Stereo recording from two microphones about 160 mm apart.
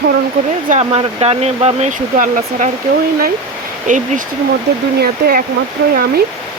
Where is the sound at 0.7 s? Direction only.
40° right (ahead or behind); by 2.6 s 55° right (ahead or behind).